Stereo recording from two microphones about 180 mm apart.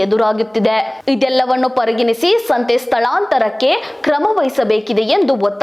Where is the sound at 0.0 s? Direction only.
Centre (ahead or behind).